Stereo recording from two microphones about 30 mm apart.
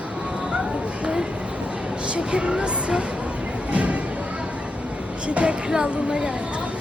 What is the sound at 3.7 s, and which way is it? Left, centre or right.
Music, right.